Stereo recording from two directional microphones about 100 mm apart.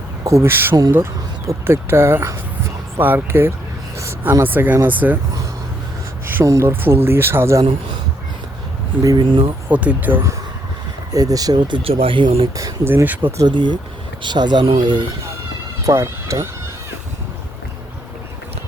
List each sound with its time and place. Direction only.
0.3 s speech: 25° right (ahead or behind)
6.4 s speech: 30° right (ahead or behind)
9.2 s speech: 55° right (ahead or behind)
9.6 s speech: 15° right (ahead or behind)
11.1 s speech: 35° right (ahead or behind)
11.8 s speech: 70° right (ahead or behind)
12.8 s speech: 20° right (ahead or behind)
13.5 s speech: 50° right (ahead or behind)
14.6 s speech: 65° right (ahead or behind)
15.8 s speech: 30° right (ahead or behind)